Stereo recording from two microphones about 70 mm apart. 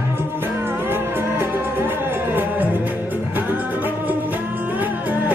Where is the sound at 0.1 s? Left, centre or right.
Right.